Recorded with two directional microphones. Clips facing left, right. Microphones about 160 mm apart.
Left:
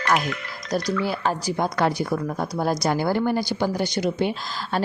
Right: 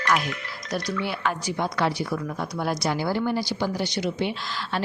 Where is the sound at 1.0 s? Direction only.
35° left (ahead or behind).